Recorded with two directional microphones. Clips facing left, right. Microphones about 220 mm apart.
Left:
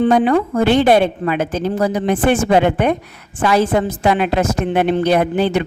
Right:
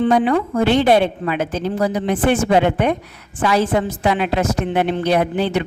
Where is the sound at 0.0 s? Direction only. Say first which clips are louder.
Left 2 dB; 45° left (ahead or behind).